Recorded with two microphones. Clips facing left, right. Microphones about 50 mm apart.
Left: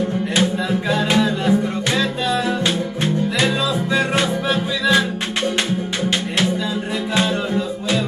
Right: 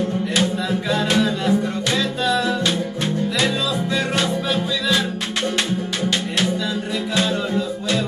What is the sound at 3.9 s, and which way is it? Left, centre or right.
Music, left.